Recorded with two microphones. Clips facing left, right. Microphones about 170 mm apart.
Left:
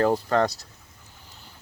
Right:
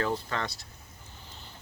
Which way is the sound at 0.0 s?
45° left (ahead or behind).